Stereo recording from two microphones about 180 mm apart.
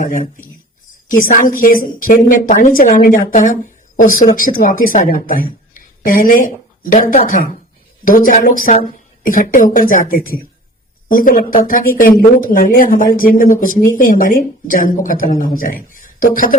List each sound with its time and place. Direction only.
0.0 s a woman's voice: 45° left (ahead or behind)
5.7 s a sound: 50° left (ahead or behind)
6.9 s a woman's voice: 45° left (ahead or behind)